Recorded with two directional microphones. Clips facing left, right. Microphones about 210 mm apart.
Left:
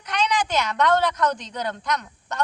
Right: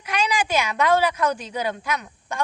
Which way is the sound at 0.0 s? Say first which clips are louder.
Even; 10° right (ahead or behind).